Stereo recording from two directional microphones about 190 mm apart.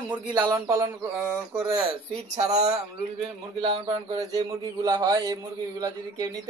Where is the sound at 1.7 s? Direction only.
35° right (ahead or behind).